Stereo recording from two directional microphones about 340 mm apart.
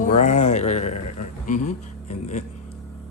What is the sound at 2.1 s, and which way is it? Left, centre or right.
Speech, centre.